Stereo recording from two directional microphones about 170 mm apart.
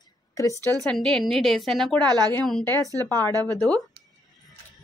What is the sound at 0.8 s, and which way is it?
A woman's voice, 5° left (ahead or behind).